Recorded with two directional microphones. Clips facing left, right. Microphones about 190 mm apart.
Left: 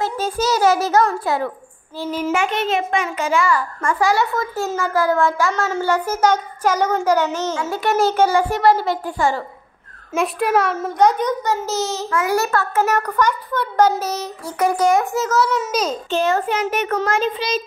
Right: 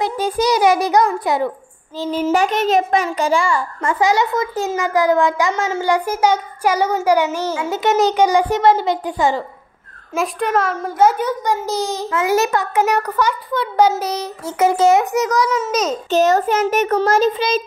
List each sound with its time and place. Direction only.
0.0 s a child's voice: 15° right (ahead or behind)
2.0 s a child's voice: 30° right (ahead or behind); by 7.7 s 10° right (ahead or behind)
7.7 s speech: 20° right (ahead or behind)
10.1 s a child's voice: 5° left (ahead or behind)
14.4 s speech: 25° right (ahead or behind)
15.5 s a child's voice: centre (ahead or behind)
16.1 s child singing: 40° right (ahead or behind)